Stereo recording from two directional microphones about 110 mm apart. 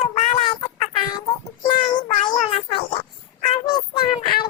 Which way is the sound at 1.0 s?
40° left (ahead or behind).